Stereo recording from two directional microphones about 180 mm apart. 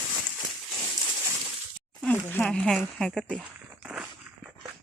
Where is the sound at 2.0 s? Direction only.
5° left (ahead or behind).